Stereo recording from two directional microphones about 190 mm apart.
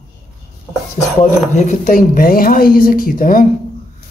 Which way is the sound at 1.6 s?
40° left (ahead or behind).